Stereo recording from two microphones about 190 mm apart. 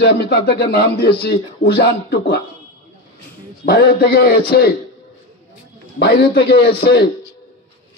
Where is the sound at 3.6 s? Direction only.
55° left (ahead or behind).